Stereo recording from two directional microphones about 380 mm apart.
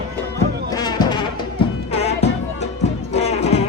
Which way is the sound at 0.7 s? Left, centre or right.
Centre.